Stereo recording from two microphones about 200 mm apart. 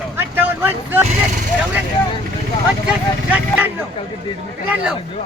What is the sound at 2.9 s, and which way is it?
Vehicle, 10° right (ahead or behind).